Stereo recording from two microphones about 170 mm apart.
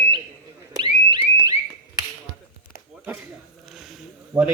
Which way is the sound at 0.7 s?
25° right (ahead or behind).